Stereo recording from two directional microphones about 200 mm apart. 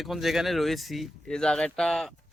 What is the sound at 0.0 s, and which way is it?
Speech, centre (ahead or behind).